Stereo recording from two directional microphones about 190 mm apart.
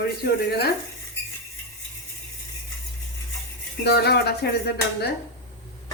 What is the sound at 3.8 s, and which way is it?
Speech, 60° left (ahead or behind).